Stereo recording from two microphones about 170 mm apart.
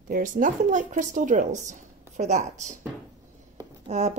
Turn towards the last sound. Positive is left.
turn(degrees=-40)  # may be behind; listen again after turning